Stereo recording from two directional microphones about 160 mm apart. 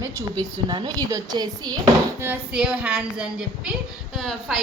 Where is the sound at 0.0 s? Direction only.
20° right (ahead or behind).